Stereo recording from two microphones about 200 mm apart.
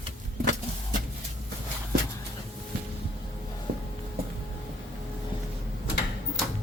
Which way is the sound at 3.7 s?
45° right (ahead or behind).